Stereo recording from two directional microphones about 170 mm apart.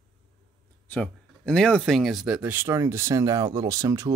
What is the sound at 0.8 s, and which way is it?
Speech, 10° left (ahead or behind).